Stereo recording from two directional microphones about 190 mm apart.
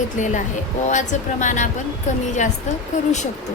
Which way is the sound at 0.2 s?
40° left (ahead or behind).